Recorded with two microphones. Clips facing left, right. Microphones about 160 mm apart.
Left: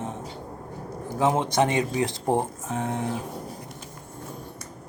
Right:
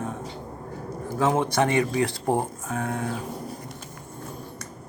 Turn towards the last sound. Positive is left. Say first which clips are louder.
# even
turn(degrees=20)  # may be behind; listen again after turning